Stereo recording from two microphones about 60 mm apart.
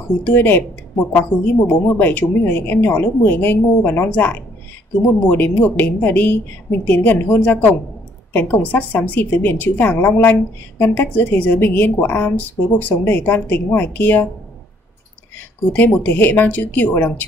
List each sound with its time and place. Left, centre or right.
0.3 s a woman's voice: left
1.7 s a woman's voice: left
15.3 s a woman's voice: left